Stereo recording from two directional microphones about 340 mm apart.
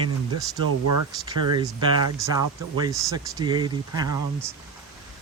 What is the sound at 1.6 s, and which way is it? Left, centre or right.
Speech, centre.